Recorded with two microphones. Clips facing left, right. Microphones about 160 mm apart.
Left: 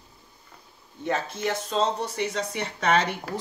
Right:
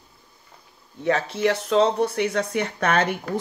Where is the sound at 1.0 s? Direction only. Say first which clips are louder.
Right 6 dB; 75° right (ahead or behind).